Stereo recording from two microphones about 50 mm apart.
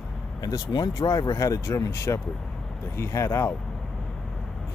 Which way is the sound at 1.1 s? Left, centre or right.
Left.